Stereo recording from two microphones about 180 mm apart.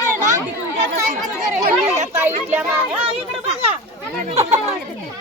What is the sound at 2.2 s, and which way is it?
Speech, 10° right (ahead or behind).